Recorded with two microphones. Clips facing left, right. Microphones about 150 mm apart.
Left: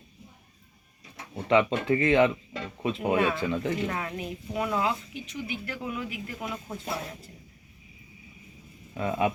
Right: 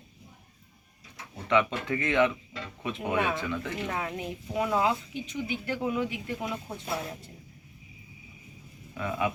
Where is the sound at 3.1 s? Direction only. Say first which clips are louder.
Even; 20° right (ahead or behind).